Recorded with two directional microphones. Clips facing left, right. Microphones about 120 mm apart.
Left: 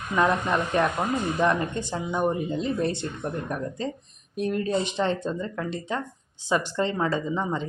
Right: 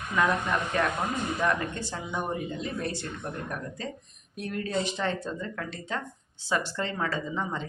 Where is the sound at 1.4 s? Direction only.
20° left (ahead or behind).